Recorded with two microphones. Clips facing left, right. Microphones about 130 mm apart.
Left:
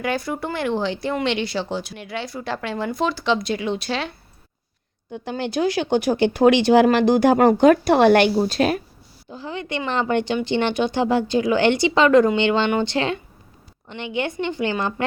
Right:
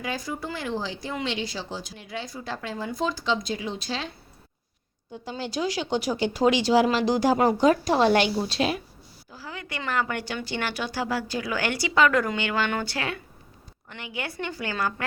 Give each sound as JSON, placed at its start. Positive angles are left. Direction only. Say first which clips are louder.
{"t": 0.0, "sound": "speech", "louder": "left 7 dB", "side_deg": 65}
{"t": 5.1, "sound": "speech", "louder": "left 6 dB", "side_deg": 65}
{"t": 8.4, "sound": "speech", "louder": "left 6 dB", "side_deg": 50}
{"t": 9.3, "sound": "speech", "louder": "left 9 dB", "side_deg": 25}